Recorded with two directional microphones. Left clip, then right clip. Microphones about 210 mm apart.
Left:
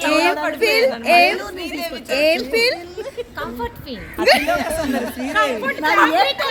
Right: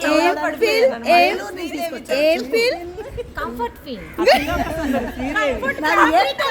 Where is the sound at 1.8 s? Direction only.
15° left (ahead or behind).